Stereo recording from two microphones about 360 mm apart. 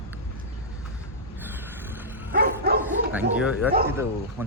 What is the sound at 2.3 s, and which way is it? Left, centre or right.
Bow-wow, right.